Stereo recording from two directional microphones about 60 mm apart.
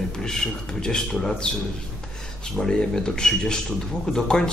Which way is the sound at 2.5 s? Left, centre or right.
Centre.